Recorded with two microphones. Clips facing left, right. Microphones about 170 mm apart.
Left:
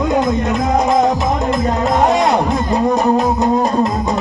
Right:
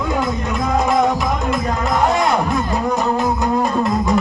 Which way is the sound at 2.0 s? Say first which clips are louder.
Left 2 dB; 20° left (ahead or behind).